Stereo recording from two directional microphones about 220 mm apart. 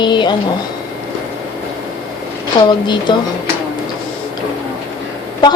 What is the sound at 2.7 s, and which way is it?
Speech, 20° left (ahead or behind).